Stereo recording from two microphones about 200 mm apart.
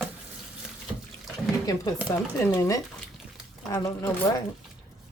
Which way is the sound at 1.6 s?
20° left (ahead or behind).